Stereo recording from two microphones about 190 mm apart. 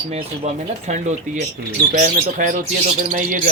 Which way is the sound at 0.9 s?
40° right (ahead or behind).